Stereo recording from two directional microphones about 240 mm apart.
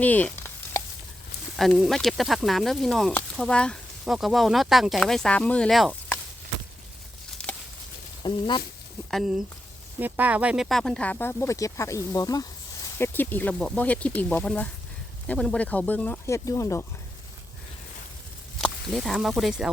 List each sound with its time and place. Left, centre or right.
0.0 s sizzle: centre
1.5 s speech: centre
7.4 s a sound: centre
8.2 s speech: centre
9.0 s speech: centre
18.6 s speech: centre